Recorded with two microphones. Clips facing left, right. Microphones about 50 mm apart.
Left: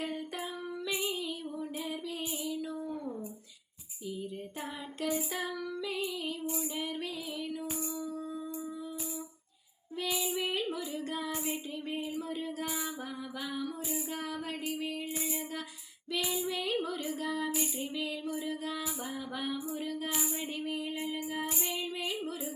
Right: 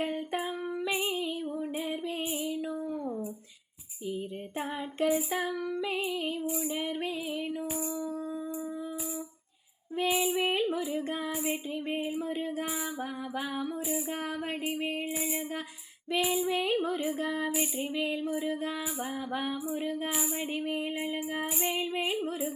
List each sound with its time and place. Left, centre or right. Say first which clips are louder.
0.0 s a sound: right 5 dB; right
0.9 s female singing: right 3 dB; centre
5.0 s child singing: right 5 dB; right
6.4 s female singing: right 3 dB; centre
6.7 s music: right 4 dB; right
10.1 s female singing: right 5 dB; right
11.9 s a sound: right 4 dB; right
14.7 s a sound: right 2 dB; right
16.2 s female singing: right 6 dB; centre
16.5 s a sound: right 5 dB; right
17.6 s female singing: right 4 dB; right
19.3 s female singing: right 3 dB; right
21.6 s female singing: right 5 dB; right